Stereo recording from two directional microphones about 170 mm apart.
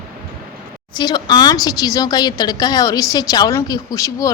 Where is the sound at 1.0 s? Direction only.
25° left (ahead or behind).